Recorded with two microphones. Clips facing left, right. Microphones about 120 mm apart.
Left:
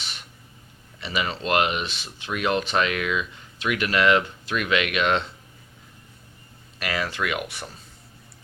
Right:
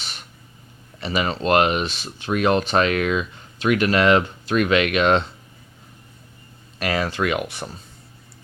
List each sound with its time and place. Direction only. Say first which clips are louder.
0.0 s a sound: right 2 dB; 40° right (ahead or behind)
0.9 s speech: right 5 dB; 40° right (ahead or behind)
6.7 s speech: right 5 dB; 35° right (ahead or behind)